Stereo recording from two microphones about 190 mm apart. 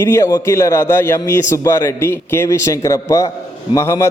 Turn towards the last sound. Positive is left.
turn(degrees=15)  # may be behind; listen again after turning